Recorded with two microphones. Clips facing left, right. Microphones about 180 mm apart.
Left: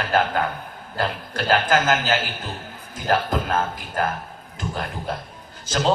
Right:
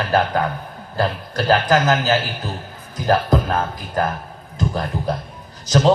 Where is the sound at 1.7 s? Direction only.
40° right (ahead or behind).